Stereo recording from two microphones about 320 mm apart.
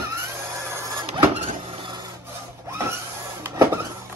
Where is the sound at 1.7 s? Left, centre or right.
Centre.